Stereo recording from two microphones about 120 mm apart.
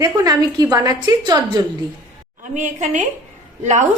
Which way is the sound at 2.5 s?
90° right.